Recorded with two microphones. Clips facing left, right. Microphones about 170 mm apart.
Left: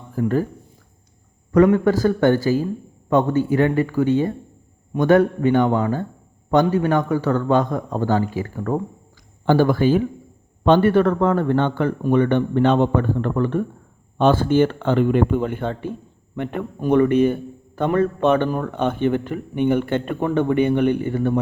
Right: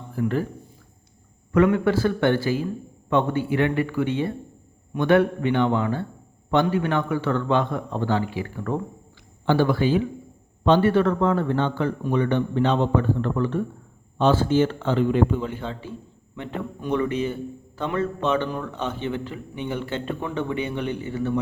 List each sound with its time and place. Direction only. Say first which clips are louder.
0.1 s speech: left 4 dB; 45° left (ahead or behind)
1.5 s a man's voice: left 4 dB; 40° left (ahead or behind)